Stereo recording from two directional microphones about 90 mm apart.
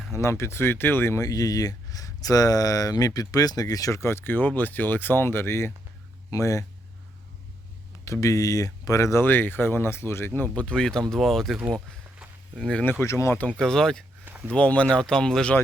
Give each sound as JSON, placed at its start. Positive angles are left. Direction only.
{"t": 0.1, "sound": "speech", "side_deg": 30}
{"t": 1.2, "sound": "speech", "side_deg": 40}
{"t": 8.0, "sound": "speech", "side_deg": 35}
{"t": 9.2, "sound": "speech", "side_deg": 20}
{"t": 12.5, "sound": "speech", "side_deg": 5}
{"t": 12.8, "sound": "speech", "side_deg": 20}
{"t": 13.1, "sound": "speech", "side_deg": 30}
{"t": 13.6, "sound": "speech", "side_deg": 5}
{"t": 14.3, "sound": "a sound", "side_deg": -20}
{"t": 14.5, "sound": "speech", "side_deg": 15}